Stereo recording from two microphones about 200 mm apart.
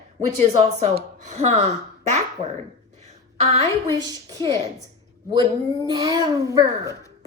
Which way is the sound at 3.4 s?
35° right (ahead or behind).